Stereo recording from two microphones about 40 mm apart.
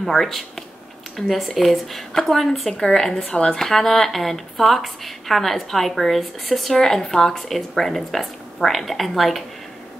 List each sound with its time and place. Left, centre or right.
0.0 s a woman's voice: centre
3.3 s speech: left
3.5 s a woman's voice: centre